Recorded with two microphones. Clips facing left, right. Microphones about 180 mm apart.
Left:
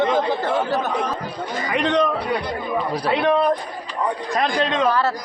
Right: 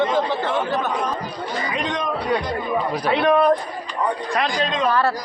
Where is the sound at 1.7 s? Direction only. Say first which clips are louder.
Left 10 dB; 65° left (ahead or behind).